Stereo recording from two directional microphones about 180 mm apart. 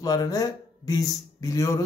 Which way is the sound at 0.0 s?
20° left (ahead or behind).